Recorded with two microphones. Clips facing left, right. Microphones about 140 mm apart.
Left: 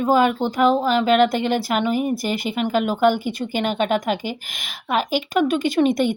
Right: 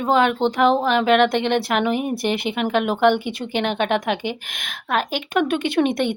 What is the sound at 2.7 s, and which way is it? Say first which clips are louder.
Speech: even; 65° right (ahead or behind).